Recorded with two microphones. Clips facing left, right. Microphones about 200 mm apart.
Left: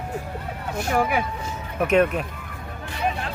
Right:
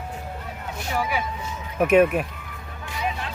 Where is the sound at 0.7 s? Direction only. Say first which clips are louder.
Left 5 dB; 50° left (ahead or behind).